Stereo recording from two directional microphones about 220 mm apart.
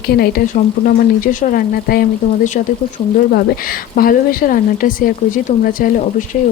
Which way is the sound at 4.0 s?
40° left (ahead or behind).